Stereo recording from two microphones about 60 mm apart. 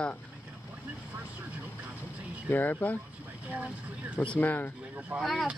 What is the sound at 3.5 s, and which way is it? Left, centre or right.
Speech, right.